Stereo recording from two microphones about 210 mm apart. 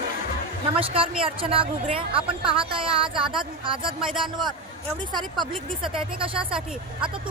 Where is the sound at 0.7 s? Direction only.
25° right (ahead or behind).